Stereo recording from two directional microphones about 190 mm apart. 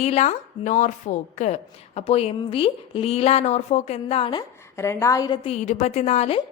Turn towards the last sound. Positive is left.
turn(degrees=35)  # may be behind; listen again after turning